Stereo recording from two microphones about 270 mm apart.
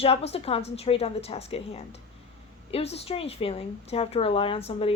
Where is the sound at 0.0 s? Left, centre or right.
Left.